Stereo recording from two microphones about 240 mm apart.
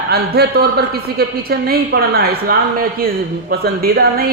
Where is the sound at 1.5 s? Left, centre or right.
Right.